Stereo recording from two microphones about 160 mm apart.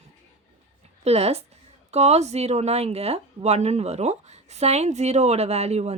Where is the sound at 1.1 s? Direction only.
40° right (ahead or behind).